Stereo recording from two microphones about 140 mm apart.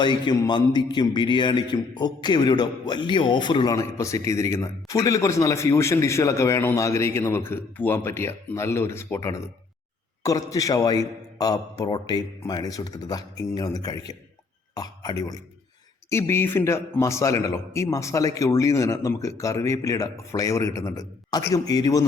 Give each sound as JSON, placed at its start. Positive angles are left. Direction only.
{"t": 0.0, "sound": "a man's voice", "side_deg": 30}